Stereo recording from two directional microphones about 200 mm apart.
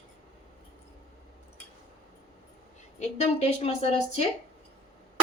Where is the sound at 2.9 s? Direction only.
30° left (ahead or behind).